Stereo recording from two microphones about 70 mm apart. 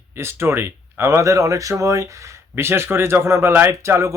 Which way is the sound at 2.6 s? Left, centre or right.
Right.